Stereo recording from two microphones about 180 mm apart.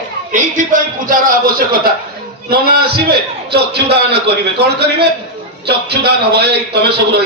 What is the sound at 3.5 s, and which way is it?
A man's voice, 65° right (ahead or behind).